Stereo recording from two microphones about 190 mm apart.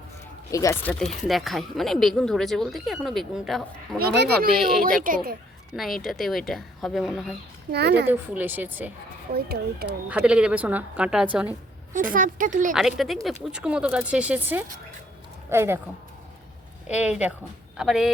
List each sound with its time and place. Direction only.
0.5 s speech: 15° left (ahead or behind); by 4.0 s centre (ahead or behind)
4.0 s speech: 65° right (ahead or behind)
4.5 s speech: centre (ahead or behind)
5.0 s speech: 50° right (ahead or behind)
5.7 s speech: centre (ahead or behind)
7.7 s speech: 60° right (ahead or behind)
8.0 s a woman's voice: 10° right (ahead or behind)
9.3 s speech: 55° right (ahead or behind)
10.1 s a woman's voice: 5° right (ahead or behind)
11.9 s speech: 45° right (ahead or behind)
12.7 s a woman's voice: centre (ahead or behind)
16.9 s a woman's voice: 5° right (ahead or behind)